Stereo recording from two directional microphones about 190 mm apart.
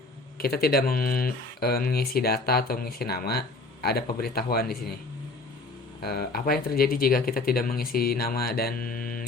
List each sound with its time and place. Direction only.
0.3 s speech: 55° left (ahead or behind)
6.1 s speech: 55° left (ahead or behind)